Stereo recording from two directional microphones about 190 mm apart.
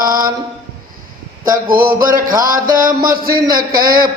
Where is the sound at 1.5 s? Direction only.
50° right (ahead or behind).